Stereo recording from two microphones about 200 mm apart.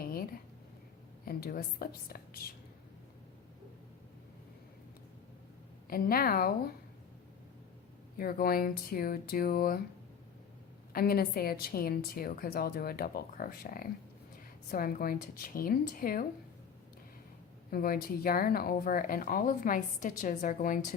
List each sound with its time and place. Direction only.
0.0 s a sound: 45° left (ahead or behind)
1.2 s a woman's voice: 45° left (ahead or behind)
5.9 s a woman's voice: 45° left (ahead or behind)
8.2 s a woman's voice: 45° left (ahead or behind)
10.9 s a woman's voice: 50° left (ahead or behind)
17.7 s a woman's voice: 45° left (ahead or behind)